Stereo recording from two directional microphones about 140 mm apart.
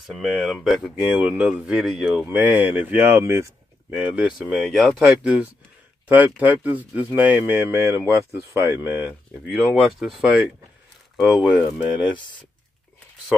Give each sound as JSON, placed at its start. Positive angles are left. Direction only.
{"t": 0.0, "sound": "speech", "side_deg": 0}
{"t": 2.2, "sound": "speech", "side_deg": -10}
{"t": 4.0, "sound": "speech", "side_deg": -5}